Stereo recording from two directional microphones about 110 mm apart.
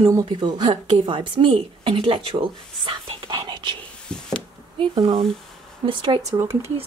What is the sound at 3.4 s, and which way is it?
Whispering, 45° right (ahead or behind).